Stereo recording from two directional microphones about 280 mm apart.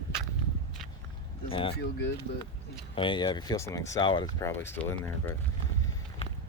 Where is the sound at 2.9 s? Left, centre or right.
Centre.